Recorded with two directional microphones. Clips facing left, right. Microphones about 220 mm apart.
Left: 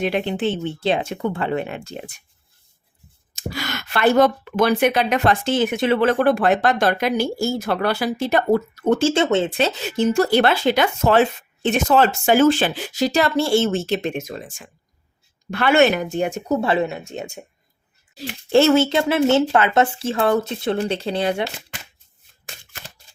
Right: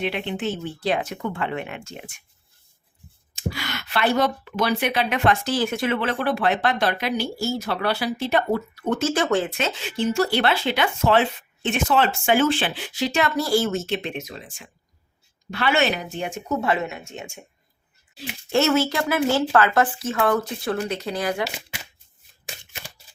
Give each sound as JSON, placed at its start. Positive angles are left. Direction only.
{"t": 0.0, "sound": "speech", "side_deg": 40}
{"t": 3.3, "sound": "speech", "side_deg": 40}
{"t": 5.5, "sound": "speech", "side_deg": 20}
{"t": 5.9, "sound": "speech", "side_deg": 45}
{"t": 9.0, "sound": "speech", "side_deg": 25}